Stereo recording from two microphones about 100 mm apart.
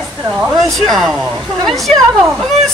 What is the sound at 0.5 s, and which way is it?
Speech, centre (ahead or behind).